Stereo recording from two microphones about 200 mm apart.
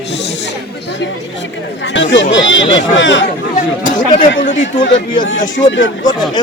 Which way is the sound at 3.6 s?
40° left (ahead or behind).